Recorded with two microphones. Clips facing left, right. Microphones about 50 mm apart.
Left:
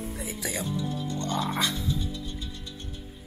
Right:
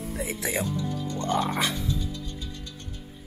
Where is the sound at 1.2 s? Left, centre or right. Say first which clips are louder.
Right 3 dB; right.